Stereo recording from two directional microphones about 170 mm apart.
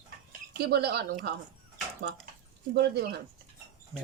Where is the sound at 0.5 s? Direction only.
70° right (ahead or behind).